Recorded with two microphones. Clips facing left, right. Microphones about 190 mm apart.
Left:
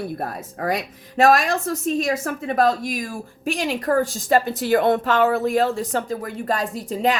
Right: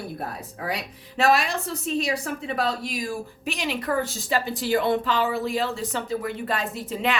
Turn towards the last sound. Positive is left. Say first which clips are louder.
# left 5 dB
turn(degrees=40)  # may be behind; listen again after turning